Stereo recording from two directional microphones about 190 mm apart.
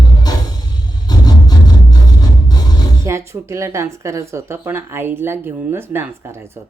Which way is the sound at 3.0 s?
15° right (ahead or behind).